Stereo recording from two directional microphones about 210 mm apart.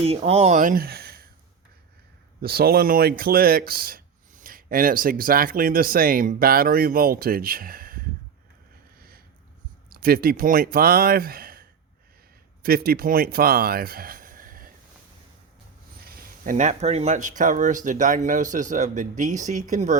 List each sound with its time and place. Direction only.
0.0 s speech: 30° right (ahead or behind); by 1.3 s 45° right (ahead or behind)
2.4 s speech: 45° right (ahead or behind)
9.0 s a sound: 45° right (ahead or behind)
9.9 s speech: 45° right (ahead or behind)
12.6 s speech: 45° right (ahead or behind)
16.0 s speech: 45° right (ahead or behind)